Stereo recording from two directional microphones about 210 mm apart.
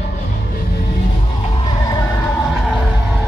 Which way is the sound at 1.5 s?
20° left (ahead or behind).